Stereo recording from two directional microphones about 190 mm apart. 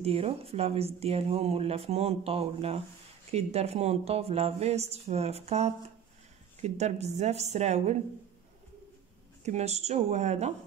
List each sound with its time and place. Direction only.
0.0 s speech: 30° right (ahead or behind)
9.4 s speech: 35° right (ahead or behind)